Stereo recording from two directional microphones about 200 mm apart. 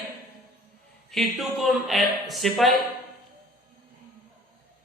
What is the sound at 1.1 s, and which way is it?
A man's voice, centre (ahead or behind).